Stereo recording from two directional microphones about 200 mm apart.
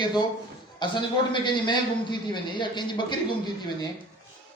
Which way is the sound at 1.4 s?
25° left (ahead or behind).